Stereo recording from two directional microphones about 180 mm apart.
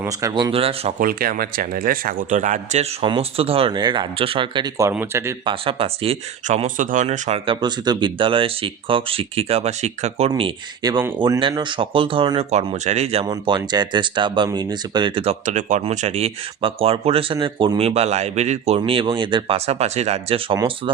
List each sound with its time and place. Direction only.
0.0 s speech: 20° right (ahead or behind)
0.5 s speech: 30° right (ahead or behind)
0.9 s speech: 55° right (ahead or behind)
3.0 s speech: 30° right (ahead or behind); by 5.3 s 15° right (ahead or behind)
5.5 s speech: 30° right (ahead or behind)
12.5 s speech: 40° right (ahead or behind)
18.8 s speech: 30° right (ahead or behind)